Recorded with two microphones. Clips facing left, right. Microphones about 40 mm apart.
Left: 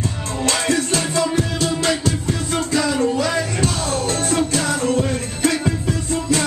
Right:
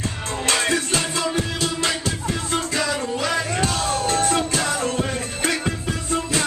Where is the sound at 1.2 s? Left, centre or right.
Centre.